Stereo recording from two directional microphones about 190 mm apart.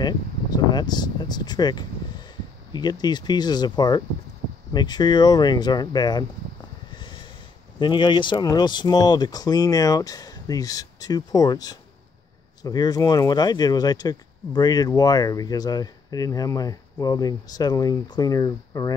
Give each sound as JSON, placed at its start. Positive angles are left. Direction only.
{"t": 0.0, "sound": "speech", "side_deg": 20}
{"t": 7.8, "sound": "speech", "side_deg": 25}